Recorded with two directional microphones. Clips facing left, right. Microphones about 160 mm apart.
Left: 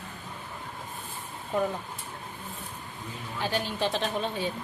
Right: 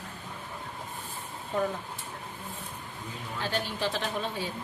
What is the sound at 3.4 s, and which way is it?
A woman's voice, 15° left (ahead or behind).